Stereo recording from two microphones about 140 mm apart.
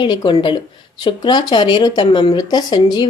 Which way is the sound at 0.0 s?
35° left (ahead or behind).